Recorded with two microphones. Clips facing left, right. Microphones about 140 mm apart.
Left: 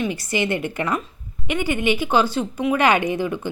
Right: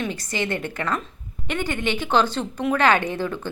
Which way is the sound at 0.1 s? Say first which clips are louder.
Left 4 dB; 10° left (ahead or behind).